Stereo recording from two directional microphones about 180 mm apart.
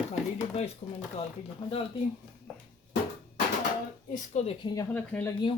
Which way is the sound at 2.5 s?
5° left (ahead or behind).